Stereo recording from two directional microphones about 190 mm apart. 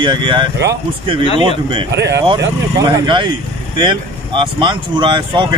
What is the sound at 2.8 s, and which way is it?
Speech, 25° right (ahead or behind).